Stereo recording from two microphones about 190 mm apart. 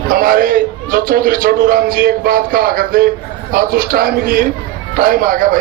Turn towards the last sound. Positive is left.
turn(degrees=-45)  # may be behind; listen again after turning